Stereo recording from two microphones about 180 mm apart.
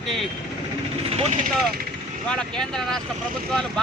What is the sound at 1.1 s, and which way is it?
Speech, 35° right (ahead or behind).